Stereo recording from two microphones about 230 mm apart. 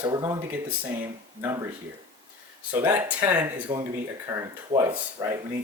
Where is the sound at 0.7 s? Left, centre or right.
Centre.